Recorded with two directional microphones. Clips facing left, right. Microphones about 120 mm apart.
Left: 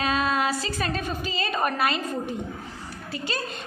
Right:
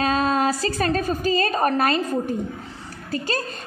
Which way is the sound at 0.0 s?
35° right (ahead or behind).